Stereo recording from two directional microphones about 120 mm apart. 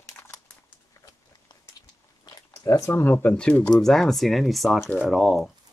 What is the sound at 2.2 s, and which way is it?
Speech, 25° left (ahead or behind).